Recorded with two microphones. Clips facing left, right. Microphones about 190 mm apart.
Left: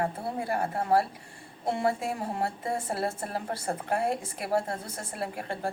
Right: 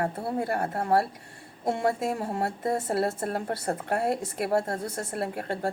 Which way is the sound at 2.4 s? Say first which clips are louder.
Right 3 dB; 55° right (ahead or behind).